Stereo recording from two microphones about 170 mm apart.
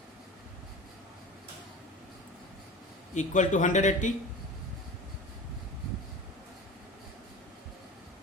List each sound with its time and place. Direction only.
3.2 s a man's voice: 45° left (ahead or behind)